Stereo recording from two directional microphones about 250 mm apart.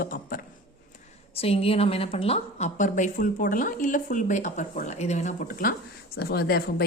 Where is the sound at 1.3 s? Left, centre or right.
Left.